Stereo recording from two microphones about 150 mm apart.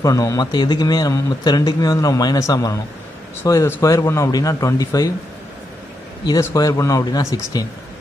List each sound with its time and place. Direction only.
0.0 s a man's voice: 20° left (ahead or behind)
6.2 s a man's voice: 25° left (ahead or behind)